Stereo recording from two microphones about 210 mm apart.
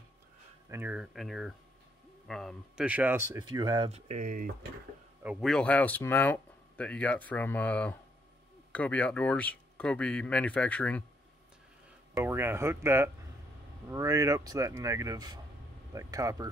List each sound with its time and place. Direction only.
0.7 s speech: 10° right (ahead or behind)
3.4 s speech: 20° right (ahead or behind)
3.9 s speech: 35° right (ahead or behind)
5.2 s speech: centre (ahead or behind)
12.2 s speech: 10° right (ahead or behind)